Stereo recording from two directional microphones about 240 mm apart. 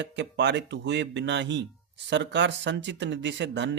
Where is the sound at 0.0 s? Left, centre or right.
Right.